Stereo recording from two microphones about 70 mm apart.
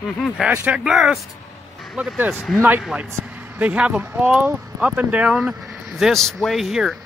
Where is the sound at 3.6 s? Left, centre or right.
Centre.